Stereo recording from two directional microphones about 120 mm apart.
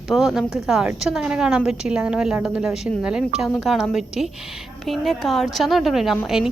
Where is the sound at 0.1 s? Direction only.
Centre (ahead or behind).